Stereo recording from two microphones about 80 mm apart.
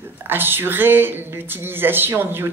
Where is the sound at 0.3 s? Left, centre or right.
Right.